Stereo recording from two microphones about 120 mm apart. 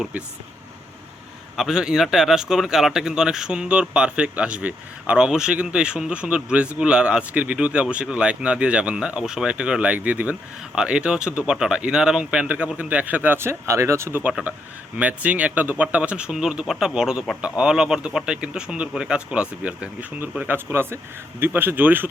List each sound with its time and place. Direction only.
1.5 s speech: 5° right (ahead or behind)